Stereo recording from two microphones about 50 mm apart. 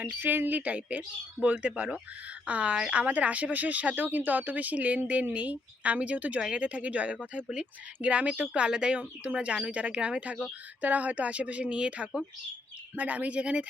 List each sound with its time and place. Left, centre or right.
0.0 s speech: right
7.3 s speech: centre